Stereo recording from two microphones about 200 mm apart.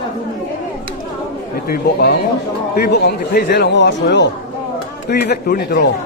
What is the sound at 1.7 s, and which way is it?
Speech, 50° left (ahead or behind).